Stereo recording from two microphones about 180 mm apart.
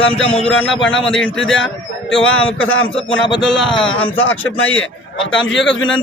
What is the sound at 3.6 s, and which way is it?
Speech, 30° left (ahead or behind).